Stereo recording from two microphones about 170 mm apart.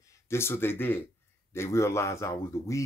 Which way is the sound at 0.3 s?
15° left (ahead or behind).